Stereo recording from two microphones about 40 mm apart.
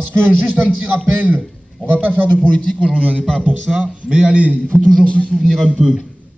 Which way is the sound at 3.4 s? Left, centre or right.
Right.